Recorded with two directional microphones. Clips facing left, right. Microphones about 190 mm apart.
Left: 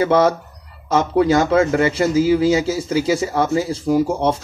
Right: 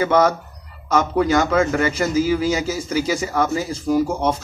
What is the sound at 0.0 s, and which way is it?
A man's voice, 30° left (ahead or behind).